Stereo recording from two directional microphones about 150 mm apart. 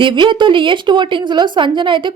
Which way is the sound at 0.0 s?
35° right (ahead or behind).